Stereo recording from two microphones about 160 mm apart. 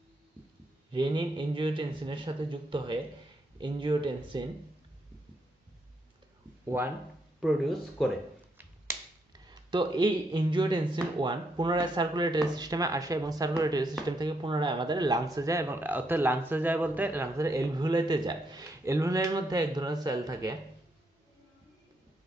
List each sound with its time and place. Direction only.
0.9 s a man's voice: 30° right (ahead or behind)
6.6 s speech: 15° right (ahead or behind)
7.3 s speech: centre (ahead or behind)
9.5 s speech: 30° right (ahead or behind)